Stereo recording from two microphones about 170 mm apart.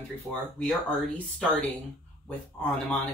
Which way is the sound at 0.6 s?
5° left (ahead or behind).